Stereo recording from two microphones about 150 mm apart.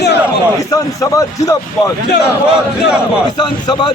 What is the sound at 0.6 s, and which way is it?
A man's voice, 20° left (ahead or behind).